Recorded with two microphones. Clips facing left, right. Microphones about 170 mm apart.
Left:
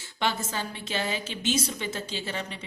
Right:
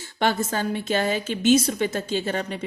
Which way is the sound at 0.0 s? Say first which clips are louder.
Right 6 dB; 50° right (ahead or behind).